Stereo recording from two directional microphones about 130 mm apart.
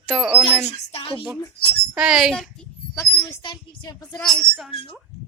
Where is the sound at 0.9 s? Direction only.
50° left (ahead or behind).